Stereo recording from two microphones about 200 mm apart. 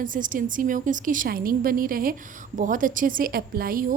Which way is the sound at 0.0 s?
40° right (ahead or behind).